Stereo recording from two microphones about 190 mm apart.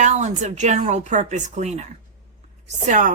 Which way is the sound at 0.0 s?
40° right (ahead or behind).